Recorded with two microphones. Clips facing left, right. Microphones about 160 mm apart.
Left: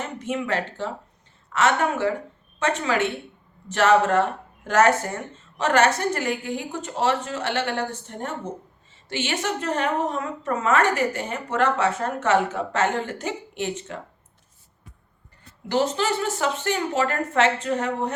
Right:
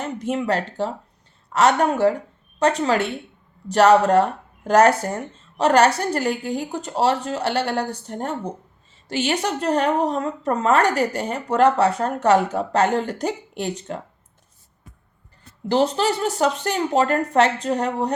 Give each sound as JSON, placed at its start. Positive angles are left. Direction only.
{"t": 0.0, "sound": "a woman's voice", "side_deg": -35}
{"t": 15.7, "sound": "a woman's voice", "side_deg": -35}